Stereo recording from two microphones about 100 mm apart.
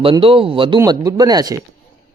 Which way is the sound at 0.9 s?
40° right (ahead or behind).